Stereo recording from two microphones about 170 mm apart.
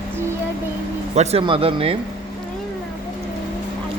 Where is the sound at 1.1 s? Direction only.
40° right (ahead or behind).